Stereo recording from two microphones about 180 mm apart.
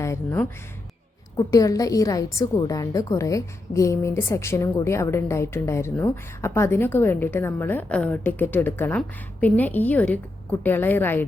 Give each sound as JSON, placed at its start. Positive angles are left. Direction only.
{"t": 0.0, "sound": "a woman's voice", "side_deg": 15}